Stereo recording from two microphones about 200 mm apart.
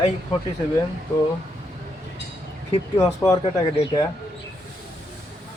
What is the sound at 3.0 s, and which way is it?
Speech, 15° left (ahead or behind).